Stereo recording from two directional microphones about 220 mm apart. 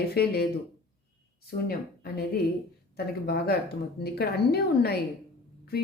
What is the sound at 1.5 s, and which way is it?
Speech, 45° left (ahead or behind).